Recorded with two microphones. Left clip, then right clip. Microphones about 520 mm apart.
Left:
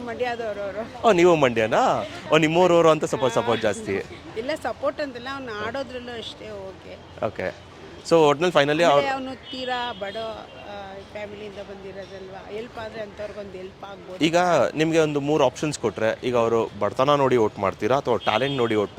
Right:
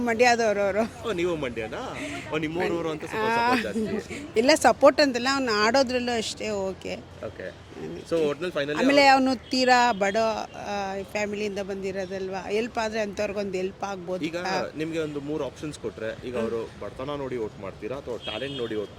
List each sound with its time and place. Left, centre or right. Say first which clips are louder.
0.0 s a man's voice: right 7 dB; right
1.0 s speech: left 11 dB; left
4.4 s speech: right 9 dB; right
8.1 s speech: left 9 dB; left
9.0 s speech: right 5 dB; right
14.2 s speech: left 12 dB; left